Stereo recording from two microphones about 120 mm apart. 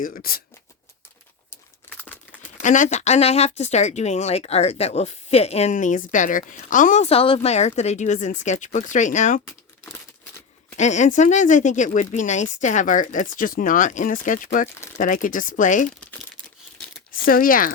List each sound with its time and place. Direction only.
2.6 s speech: 90° left
7.1 s speech: 50° left (ahead or behind); by 9.4 s 90° left
10.8 s speech: 80° left
16.0 s crumpling: 10° left (ahead or behind)